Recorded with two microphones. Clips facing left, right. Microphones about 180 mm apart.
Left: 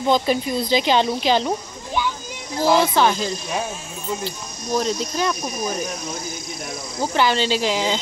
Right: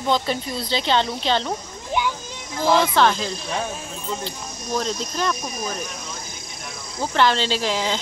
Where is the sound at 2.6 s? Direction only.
5° left (ahead or behind).